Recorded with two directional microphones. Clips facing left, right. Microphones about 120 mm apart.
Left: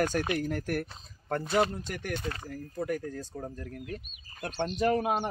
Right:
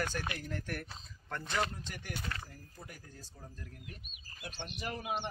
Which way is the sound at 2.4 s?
70° left (ahead or behind).